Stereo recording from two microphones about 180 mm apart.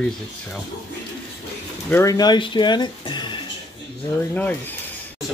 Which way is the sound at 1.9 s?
15° left (ahead or behind).